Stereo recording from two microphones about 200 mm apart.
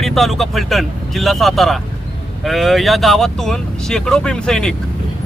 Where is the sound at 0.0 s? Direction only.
Centre (ahead or behind).